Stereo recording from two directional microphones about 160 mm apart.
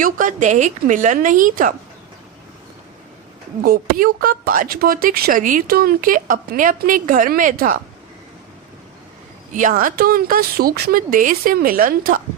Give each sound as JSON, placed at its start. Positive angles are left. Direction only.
{"t": 0.0, "sound": "a woman's voice", "side_deg": -55}
{"t": 3.6, "sound": "speech", "side_deg": -70}
{"t": 9.6, "sound": "speech", "side_deg": -55}